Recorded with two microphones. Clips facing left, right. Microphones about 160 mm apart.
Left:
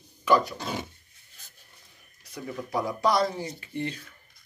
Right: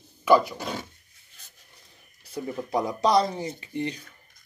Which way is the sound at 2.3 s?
20° right (ahead or behind).